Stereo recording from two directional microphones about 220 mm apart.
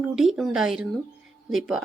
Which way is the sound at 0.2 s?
Centre (ahead or behind).